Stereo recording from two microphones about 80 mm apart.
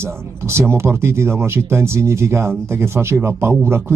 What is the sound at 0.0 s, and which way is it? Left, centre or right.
Speech, right.